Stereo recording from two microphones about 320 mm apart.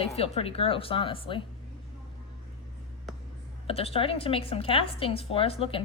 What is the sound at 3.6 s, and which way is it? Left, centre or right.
A woman's voice, centre.